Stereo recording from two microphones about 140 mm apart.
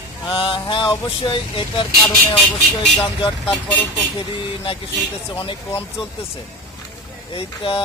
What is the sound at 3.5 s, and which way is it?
Speech, 10° left (ahead or behind).